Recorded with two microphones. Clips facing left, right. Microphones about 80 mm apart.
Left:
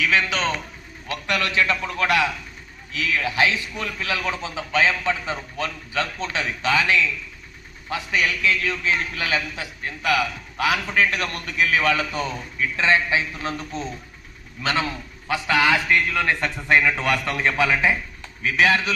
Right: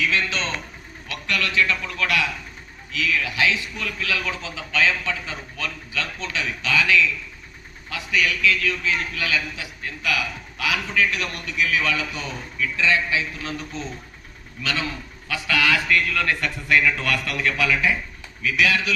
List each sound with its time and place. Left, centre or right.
1.0 s a man's voice: left